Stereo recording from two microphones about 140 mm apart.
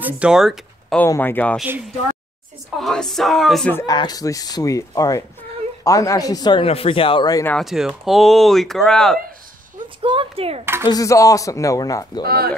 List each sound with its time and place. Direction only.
0.0 s speech: 5° right (ahead or behind)
0.9 s speech: 15° left (ahead or behind)
2.8 s speech: 5° left (ahead or behind)
3.8 s speech: 30° left (ahead or behind)
6.6 s a man's voice: 40° left (ahead or behind)
7.6 s speech: 5° right (ahead or behind)
9.8 s speech: 35° right (ahead or behind)
10.6 s speech: 15° right (ahead or behind)
10.9 s speech: 25° left (ahead or behind)
12.3 s speech: 90° right